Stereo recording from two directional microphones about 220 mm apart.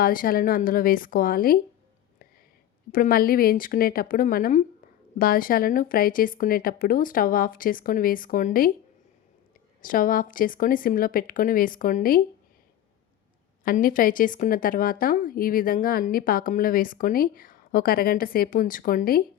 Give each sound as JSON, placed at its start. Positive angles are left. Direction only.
{"t": 0.0, "sound": "a woman's voice", "side_deg": 40}
{"t": 2.9, "sound": "a woman's voice", "side_deg": 40}
{"t": 9.8, "sound": "a woman's voice", "side_deg": 40}
{"t": 13.7, "sound": "a woman's voice", "side_deg": 40}